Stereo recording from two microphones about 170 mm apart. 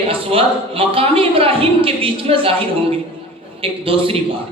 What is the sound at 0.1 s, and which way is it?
A woman's voice, 35° right (ahead or behind).